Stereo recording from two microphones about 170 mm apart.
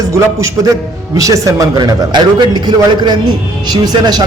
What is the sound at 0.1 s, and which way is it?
A man's voice, 20° right (ahead or behind).